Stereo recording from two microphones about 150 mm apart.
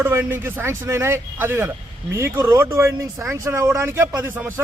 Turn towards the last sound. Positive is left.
turn(degrees=-15)  # may be behind; listen again after turning